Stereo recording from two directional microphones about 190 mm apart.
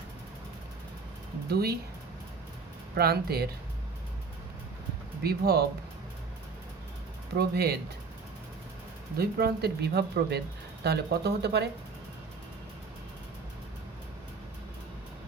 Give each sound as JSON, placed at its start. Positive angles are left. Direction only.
{"t": 1.5, "sound": "speech", "side_deg": -55}
{"t": 2.9, "sound": "speech", "side_deg": -55}
{"t": 5.2, "sound": "speech", "side_deg": -55}
{"t": 7.3, "sound": "speech", "side_deg": -55}
{"t": 9.1, "sound": "speech", "side_deg": -55}